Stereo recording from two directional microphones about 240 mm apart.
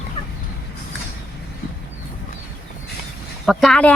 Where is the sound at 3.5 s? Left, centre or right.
Centre.